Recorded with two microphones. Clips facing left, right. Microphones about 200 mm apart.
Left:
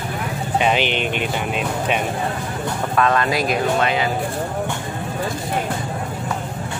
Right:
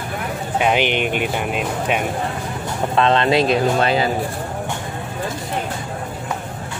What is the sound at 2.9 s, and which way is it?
Speech, 25° right (ahead or behind).